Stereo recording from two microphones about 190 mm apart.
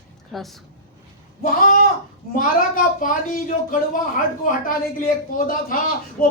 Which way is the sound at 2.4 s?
45° left (ahead or behind).